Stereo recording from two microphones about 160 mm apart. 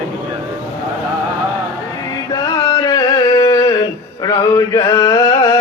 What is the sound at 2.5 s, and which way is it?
Carnatic music, 25° left (ahead or behind).